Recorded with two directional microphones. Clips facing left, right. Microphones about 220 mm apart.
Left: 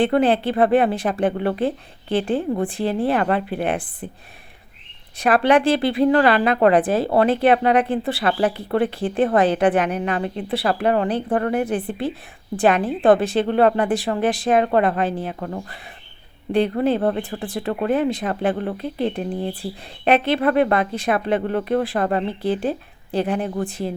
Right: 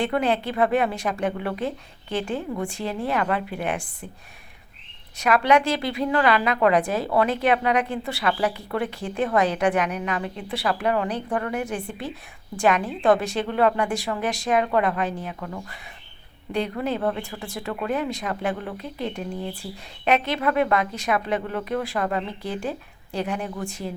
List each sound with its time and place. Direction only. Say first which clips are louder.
0.0 s speech: left 6 dB; 30° left (ahead or behind)
5.1 s speech: left 3 dB; 30° left (ahead or behind)